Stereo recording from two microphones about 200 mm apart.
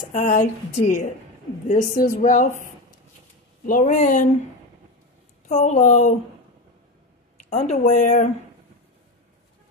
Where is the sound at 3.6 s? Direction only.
40° left (ahead or behind).